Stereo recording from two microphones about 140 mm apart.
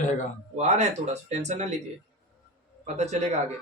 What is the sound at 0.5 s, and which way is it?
Speech, 55° right (ahead or behind).